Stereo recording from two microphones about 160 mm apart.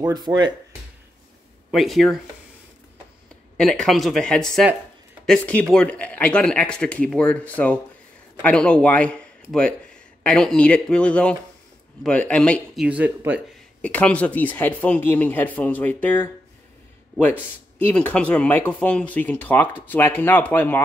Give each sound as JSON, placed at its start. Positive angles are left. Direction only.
{"t": 0.0, "sound": "speech", "side_deg": -25}
{"t": 1.7, "sound": "speech", "side_deg": 0}
{"t": 3.5, "sound": "a man's voice", "side_deg": 5}
{"t": 12.8, "sound": "speech", "side_deg": -10}
{"t": 13.7, "sound": "speech", "side_deg": 5}